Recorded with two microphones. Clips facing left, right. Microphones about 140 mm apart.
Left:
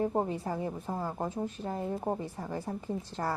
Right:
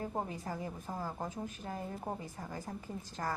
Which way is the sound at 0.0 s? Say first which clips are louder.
Left 8 dB; 30° left (ahead or behind).